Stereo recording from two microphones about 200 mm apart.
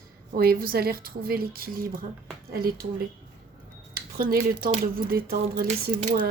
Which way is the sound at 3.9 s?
50° right (ahead or behind).